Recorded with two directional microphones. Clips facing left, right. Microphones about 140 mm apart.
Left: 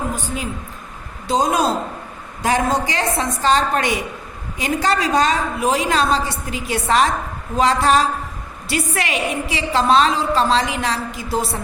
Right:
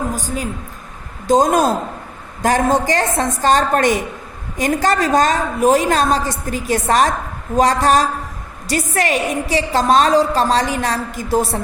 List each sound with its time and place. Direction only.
0.1 s a woman's voice: 40° right (ahead or behind)